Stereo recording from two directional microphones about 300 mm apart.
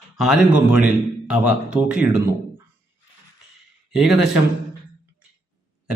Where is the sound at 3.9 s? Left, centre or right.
Centre.